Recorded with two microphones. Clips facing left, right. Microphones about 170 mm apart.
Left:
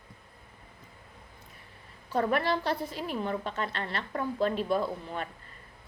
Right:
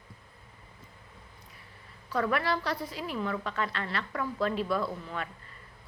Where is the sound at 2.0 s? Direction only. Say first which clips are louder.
Left 1 dB; 25° left (ahead or behind).